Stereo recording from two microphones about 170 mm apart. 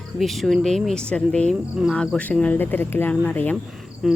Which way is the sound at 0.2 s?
Centre (ahead or behind).